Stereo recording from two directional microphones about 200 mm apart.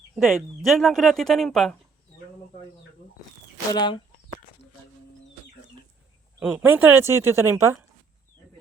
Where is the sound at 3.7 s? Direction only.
20° left (ahead or behind).